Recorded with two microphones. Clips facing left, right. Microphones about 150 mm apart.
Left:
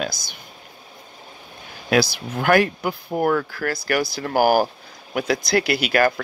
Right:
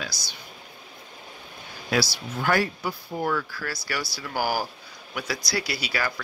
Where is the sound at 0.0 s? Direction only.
50° left (ahead or behind).